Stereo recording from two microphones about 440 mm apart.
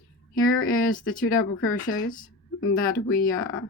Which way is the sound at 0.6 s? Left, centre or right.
Centre.